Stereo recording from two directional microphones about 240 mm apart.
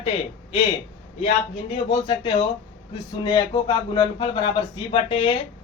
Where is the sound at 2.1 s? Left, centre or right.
Left.